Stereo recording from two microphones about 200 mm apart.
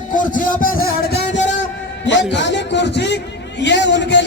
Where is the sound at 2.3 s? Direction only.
60° left (ahead or behind).